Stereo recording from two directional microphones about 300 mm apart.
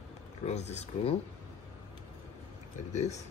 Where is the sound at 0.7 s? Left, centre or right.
Centre.